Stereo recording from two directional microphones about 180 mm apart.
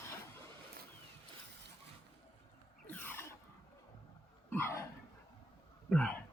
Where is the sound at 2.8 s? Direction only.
10° left (ahead or behind).